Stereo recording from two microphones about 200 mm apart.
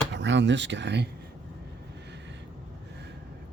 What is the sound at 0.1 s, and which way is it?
Speech, 60° right (ahead or behind).